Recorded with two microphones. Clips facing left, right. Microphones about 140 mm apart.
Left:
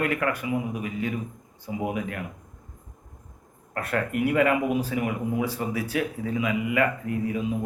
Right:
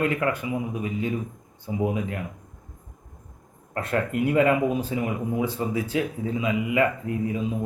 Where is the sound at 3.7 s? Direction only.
25° right (ahead or behind).